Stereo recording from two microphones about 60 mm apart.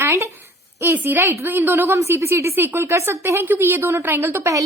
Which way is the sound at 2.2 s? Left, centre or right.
Right.